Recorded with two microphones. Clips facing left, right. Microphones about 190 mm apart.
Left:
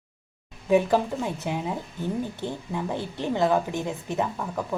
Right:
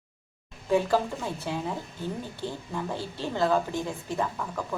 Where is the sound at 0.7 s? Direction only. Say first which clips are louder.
Left 3 dB; 15° left (ahead or behind).